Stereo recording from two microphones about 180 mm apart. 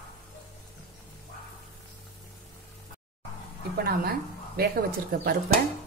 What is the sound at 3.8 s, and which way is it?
Speech, 60° right (ahead or behind).